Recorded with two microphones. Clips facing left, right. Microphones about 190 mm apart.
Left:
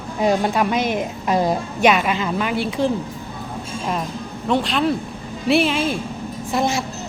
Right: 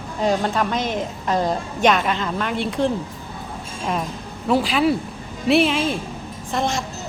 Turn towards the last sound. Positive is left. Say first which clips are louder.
# left 3 dB
turn(degrees=5)  # may be behind; listen again after turning